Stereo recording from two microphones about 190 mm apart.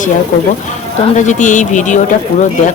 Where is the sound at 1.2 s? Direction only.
40° left (ahead or behind).